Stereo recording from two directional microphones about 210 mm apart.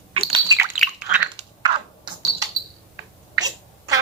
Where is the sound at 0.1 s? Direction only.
30° right (ahead or behind).